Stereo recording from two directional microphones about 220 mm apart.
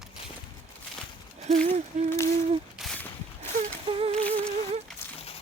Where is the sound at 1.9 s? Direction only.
35° right (ahead or behind).